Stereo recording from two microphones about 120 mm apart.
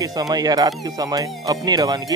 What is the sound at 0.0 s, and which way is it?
Speech, 30° right (ahead or behind).